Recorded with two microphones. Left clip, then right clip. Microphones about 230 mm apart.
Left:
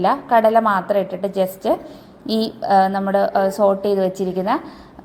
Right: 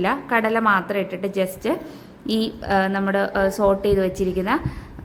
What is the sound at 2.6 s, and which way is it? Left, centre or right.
Speech, right.